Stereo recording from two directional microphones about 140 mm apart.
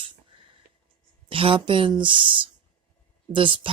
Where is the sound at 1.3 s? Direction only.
40° right (ahead or behind).